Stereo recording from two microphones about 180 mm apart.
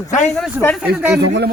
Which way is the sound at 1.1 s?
70° right (ahead or behind).